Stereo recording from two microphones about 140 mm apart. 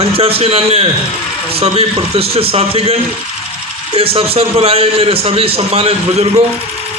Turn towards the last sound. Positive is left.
turn(degrees=-45)  # may be behind; listen again after turning